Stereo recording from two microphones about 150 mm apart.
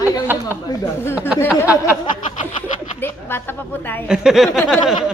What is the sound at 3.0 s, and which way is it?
A woman's voice, 15° left (ahead or behind).